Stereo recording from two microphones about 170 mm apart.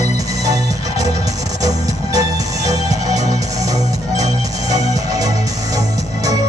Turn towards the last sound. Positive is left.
turn(degrees=-20)  # may be behind; listen again after turning